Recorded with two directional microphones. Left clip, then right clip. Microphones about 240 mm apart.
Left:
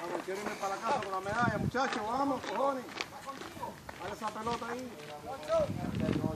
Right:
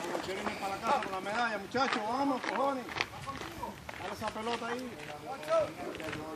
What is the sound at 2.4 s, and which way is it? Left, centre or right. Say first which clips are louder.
Speech: even; left.